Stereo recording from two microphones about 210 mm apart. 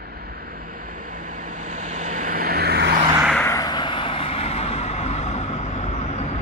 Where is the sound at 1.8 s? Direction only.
35° right (ahead or behind).